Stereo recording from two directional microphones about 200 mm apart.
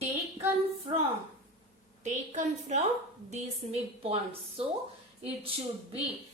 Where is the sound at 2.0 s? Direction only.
35° right (ahead or behind).